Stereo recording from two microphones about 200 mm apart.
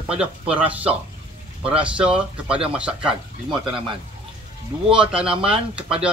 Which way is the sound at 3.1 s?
25° right (ahead or behind).